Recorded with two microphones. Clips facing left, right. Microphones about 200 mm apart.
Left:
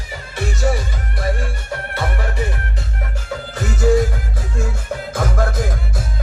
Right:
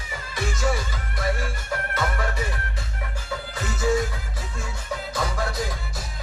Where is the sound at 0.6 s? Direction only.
35° left (ahead or behind).